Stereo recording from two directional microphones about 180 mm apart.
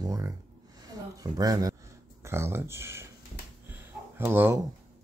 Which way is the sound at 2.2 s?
15° right (ahead or behind).